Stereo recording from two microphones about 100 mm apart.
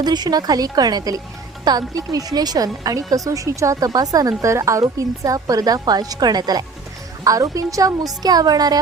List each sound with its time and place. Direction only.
0.0 s speech: 45° right (ahead or behind)